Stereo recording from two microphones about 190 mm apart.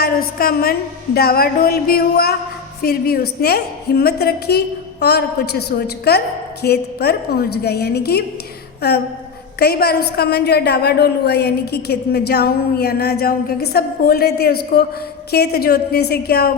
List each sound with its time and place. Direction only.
0.0 s a woman's voice: 50° left (ahead or behind)
9.6 s a woman's voice: 55° left (ahead or behind)